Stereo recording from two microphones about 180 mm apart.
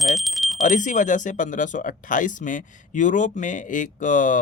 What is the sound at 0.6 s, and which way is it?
A man's voice, 45° left (ahead or behind).